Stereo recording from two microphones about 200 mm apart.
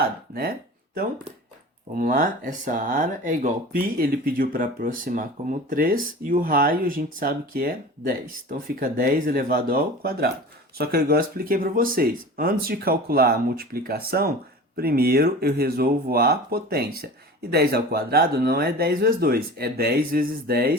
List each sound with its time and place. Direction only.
0.3 s speech: 50° right (ahead or behind)
2.0 s speech: 45° right (ahead or behind)